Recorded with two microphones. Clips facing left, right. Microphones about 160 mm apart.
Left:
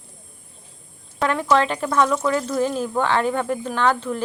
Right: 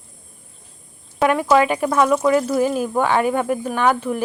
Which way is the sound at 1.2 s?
10° right (ahead or behind).